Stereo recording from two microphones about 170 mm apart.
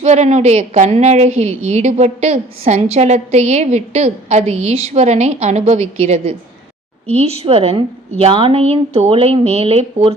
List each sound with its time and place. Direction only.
0.0 s a woman's voice: 40° right (ahead or behind)